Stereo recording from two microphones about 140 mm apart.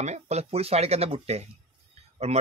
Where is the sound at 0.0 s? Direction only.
50° right (ahead or behind).